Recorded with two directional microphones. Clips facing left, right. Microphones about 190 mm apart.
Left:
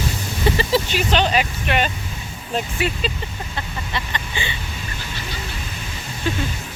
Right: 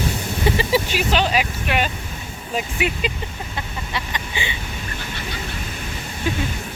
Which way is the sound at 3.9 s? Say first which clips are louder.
Even; 15° right (ahead or behind).